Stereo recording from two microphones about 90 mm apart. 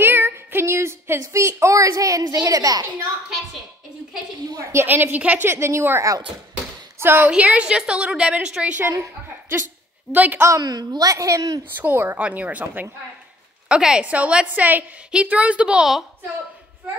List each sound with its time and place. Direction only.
0.0 s a woman's voice: 25° right (ahead or behind); by 2.9 s 40° right (ahead or behind)
4.7 s a woman's voice: 25° right (ahead or behind)
9.0 s a woman's voice: 30° right (ahead or behind)
10.6 s a woman's voice: 50° right (ahead or behind)
11.7 s a woman's voice: 20° right (ahead or behind); by 16.1 s 5° right (ahead or behind)